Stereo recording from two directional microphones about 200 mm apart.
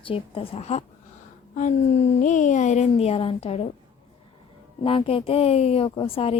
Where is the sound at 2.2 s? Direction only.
40° left (ahead or behind).